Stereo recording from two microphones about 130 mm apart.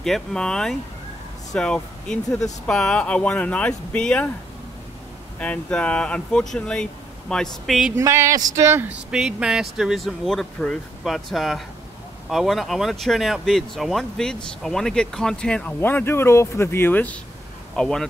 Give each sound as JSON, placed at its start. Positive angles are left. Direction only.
{"t": 0.0, "sound": "speech", "side_deg": 5}
{"t": 5.4, "sound": "speech", "side_deg": 10}
{"t": 7.9, "sound": "speech", "side_deg": -20}
{"t": 9.1, "sound": "speech", "side_deg": -5}